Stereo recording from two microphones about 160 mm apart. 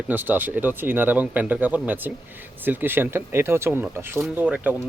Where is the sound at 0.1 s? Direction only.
10° right (ahead or behind).